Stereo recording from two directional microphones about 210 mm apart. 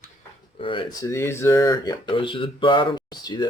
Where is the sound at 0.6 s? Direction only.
25° left (ahead or behind).